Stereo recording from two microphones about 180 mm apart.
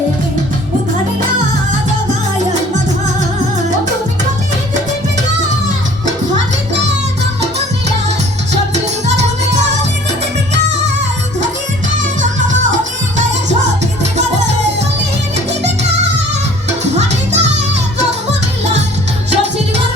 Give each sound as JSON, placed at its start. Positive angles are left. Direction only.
{"t": 16.9, "sound": "music", "side_deg": -40}